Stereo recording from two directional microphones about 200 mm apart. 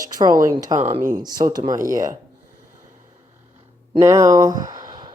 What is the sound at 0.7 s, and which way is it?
Speech, 35° right (ahead or behind).